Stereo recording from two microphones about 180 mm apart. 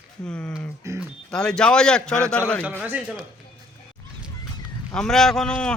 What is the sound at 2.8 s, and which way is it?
Speech, 5° right (ahead or behind).